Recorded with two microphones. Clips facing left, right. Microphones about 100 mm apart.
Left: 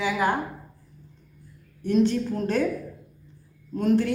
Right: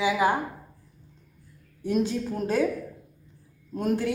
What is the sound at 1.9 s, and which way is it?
Speech, 10° right (ahead or behind).